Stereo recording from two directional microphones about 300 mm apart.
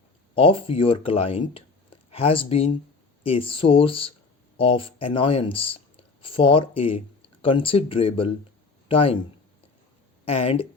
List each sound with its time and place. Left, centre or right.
0.3 s a man's voice: centre
10.2 s speech: left